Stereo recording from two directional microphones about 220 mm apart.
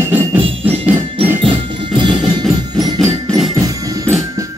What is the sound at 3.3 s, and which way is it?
Music, 5° left (ahead or behind).